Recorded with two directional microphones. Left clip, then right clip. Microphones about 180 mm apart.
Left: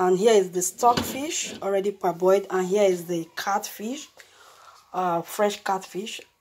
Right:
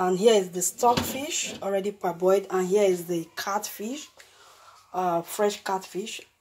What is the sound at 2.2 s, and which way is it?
Speech, 10° left (ahead or behind).